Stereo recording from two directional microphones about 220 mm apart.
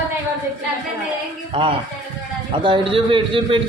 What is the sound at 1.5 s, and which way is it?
Speech, 25° right (ahead or behind).